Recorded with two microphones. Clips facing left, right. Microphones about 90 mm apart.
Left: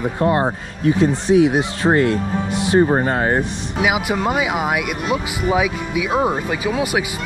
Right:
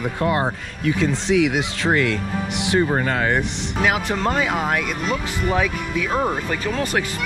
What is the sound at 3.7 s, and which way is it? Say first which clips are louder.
Speech: left 2 dB; 10° left (ahead or behind).